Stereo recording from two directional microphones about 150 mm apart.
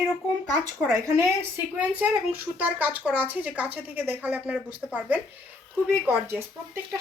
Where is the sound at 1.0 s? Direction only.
15° right (ahead or behind).